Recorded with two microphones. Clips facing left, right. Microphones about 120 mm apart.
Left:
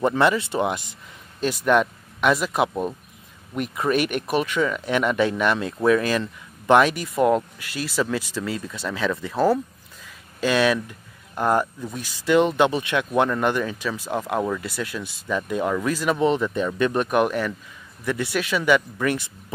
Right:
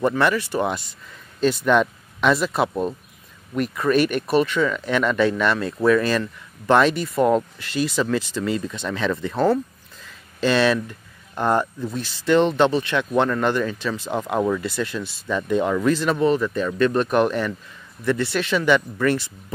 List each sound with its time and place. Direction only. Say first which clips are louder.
0.0 s speech: even; 20° left (ahead or behind)
16.2 s speech: right 1 dB; 20° left (ahead or behind)